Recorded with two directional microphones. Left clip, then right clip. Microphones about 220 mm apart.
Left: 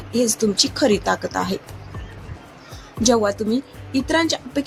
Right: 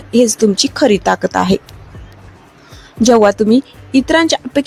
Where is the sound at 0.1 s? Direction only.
40° right (ahead or behind).